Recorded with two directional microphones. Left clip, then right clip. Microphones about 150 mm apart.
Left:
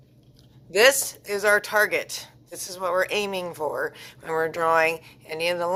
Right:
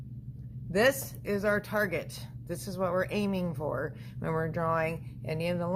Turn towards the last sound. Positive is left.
turn(degrees=20)  # may be behind; listen again after turning